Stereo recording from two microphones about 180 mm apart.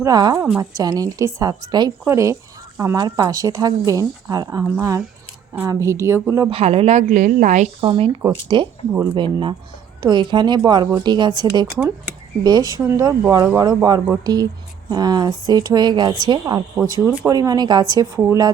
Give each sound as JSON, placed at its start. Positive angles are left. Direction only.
{"t": 0.0, "sound": "a woman's voice", "side_deg": -20}
{"t": 6.5, "sound": "a woman's voice", "side_deg": -35}
{"t": 7.9, "sound": "a woman's voice", "side_deg": -30}